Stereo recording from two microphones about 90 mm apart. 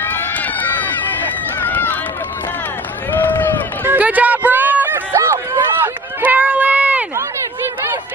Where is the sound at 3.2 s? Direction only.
20° left (ahead or behind).